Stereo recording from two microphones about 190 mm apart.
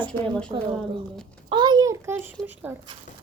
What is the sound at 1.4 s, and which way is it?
A child's voice, 25° right (ahead or behind).